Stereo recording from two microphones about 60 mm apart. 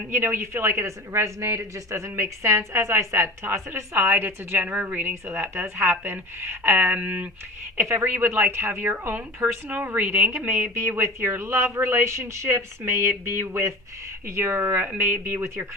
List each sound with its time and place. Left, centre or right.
0.1 s a woman's voice: right
3.7 s a woman's voice: right
10.8 s a woman's voice: right
14.8 s a woman's voice: right